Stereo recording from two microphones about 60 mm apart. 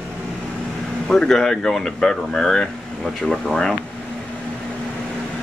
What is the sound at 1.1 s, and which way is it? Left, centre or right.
Speech, centre.